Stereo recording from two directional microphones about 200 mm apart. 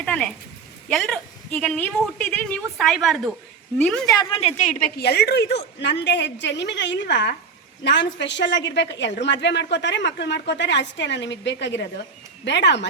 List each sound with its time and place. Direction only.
0.0 s a woman's voice: 5° left (ahead or behind)
4.0 s a woman's voice: 20° left (ahead or behind); by 12.9 s 60° left (ahead or behind)